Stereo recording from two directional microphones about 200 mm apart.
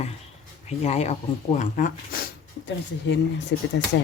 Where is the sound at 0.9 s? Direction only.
35° left (ahead or behind).